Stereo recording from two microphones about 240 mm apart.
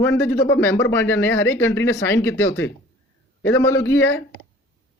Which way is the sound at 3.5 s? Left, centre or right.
Centre.